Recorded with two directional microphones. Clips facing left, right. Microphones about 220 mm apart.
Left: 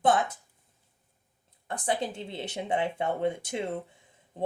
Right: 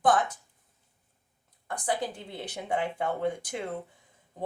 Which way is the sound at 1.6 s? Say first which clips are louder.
Left 1 dB; 25° left (ahead or behind).